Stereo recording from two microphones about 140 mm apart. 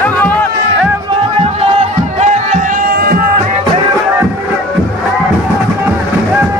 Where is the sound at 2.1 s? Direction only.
60° right (ahead or behind); by 3.2 s 90° right.